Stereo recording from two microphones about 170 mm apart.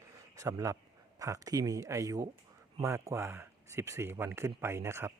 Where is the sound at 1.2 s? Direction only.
20° right (ahead or behind).